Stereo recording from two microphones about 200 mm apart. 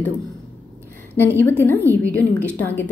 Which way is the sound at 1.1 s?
10° left (ahead or behind).